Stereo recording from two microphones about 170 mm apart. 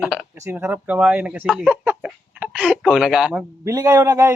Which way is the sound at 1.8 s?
10° right (ahead or behind).